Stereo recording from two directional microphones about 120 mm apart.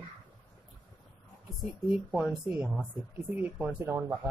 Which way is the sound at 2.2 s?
5° right (ahead or behind).